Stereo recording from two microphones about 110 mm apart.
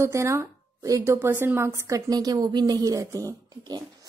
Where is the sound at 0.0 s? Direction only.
25° right (ahead or behind).